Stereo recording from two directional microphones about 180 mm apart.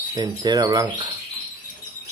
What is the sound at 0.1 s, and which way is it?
Speech, 25° right (ahead or behind).